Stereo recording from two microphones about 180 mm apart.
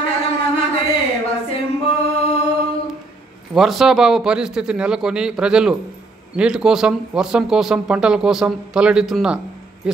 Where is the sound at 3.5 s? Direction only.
Centre (ahead or behind).